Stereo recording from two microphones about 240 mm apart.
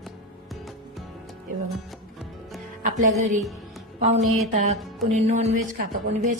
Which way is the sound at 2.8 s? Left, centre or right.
Right.